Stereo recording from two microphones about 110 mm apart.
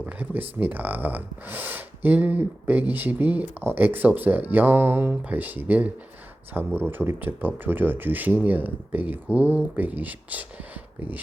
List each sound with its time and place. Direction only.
0.0 s speech: 15° right (ahead or behind)